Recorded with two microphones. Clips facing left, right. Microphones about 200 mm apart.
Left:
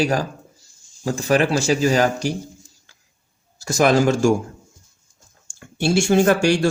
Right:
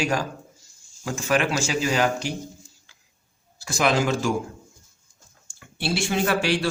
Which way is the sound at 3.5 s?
45° left (ahead or behind).